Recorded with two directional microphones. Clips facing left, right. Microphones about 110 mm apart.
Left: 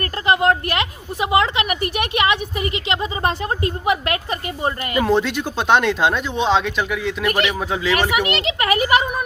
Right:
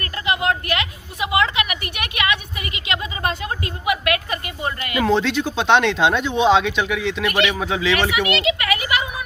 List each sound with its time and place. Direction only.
0.0 s a woman's voice: 40° left (ahead or behind)
5.0 s speech: 10° left (ahead or behind)
8.1 s a woman's voice: 40° left (ahead or behind)